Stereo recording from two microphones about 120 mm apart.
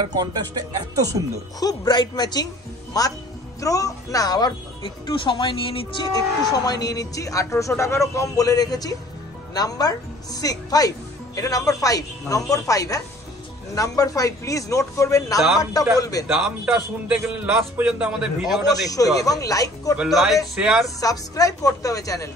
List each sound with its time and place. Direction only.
0.1 s speech: 35° right (ahead or behind)
1.6 s speech: 35° left (ahead or behind)
6.1 s speech: 30° left (ahead or behind)
16.3 s a man's voice: 5° right (ahead or behind)
18.9 s speech: 30° left (ahead or behind)
20.0 s a man's voice: centre (ahead or behind)
21.0 s speech: 30° left (ahead or behind)